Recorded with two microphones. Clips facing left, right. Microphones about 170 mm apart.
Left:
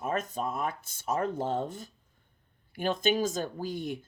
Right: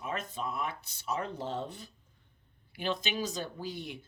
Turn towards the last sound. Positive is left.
turn(degrees=45)  # may be behind; listen again after turning